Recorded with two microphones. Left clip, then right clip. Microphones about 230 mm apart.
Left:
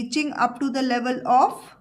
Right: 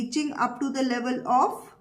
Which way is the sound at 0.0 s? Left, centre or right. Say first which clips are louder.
Left 4 dB; left.